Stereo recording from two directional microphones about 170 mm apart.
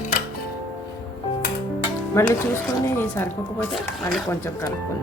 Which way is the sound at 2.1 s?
15° left (ahead or behind).